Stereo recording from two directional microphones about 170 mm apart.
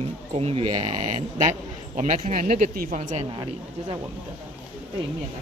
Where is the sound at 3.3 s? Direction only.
30° right (ahead or behind).